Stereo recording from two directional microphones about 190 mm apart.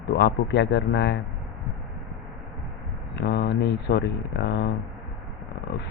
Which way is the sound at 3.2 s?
65° left (ahead or behind).